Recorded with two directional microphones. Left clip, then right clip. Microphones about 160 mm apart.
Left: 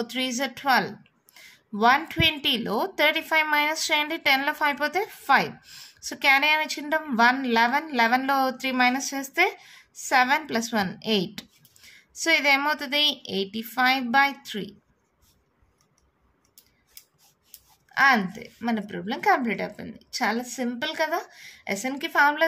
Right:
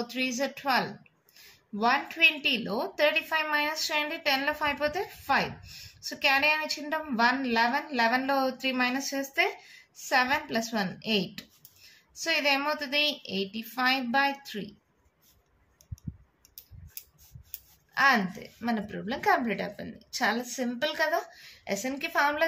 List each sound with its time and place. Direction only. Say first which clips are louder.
0.0 s a woman's voice: left 3 dB; 45° left (ahead or behind)
17.9 s a woman's voice: left 4 dB; 40° left (ahead or behind)